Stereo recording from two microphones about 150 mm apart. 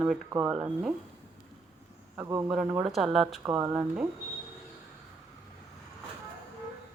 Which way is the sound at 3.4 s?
20° right (ahead or behind).